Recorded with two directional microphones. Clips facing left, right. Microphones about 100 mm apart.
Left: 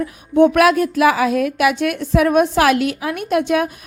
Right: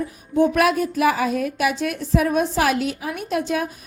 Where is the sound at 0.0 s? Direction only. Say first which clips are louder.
Left 6 dB; 70° left (ahead or behind).